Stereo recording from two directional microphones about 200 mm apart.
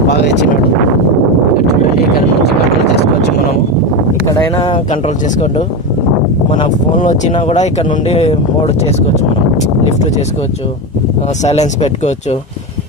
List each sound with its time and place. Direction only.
2.1 s speech: 55° left (ahead or behind)
4.3 s speech: 20° left (ahead or behind)
4.9 s speech: 35° left (ahead or behind)
7.0 s speech: 40° left (ahead or behind)
11.4 s speech: 35° left (ahead or behind)